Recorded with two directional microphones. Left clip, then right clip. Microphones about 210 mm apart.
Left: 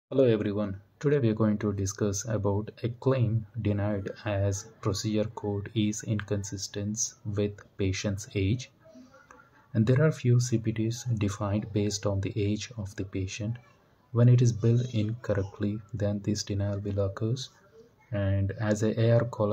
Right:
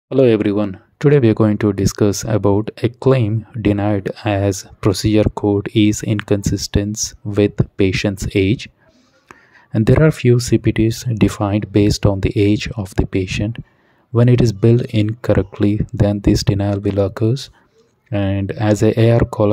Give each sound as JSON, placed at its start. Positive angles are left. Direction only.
{"t": 0.1, "sound": "speech", "side_deg": -40}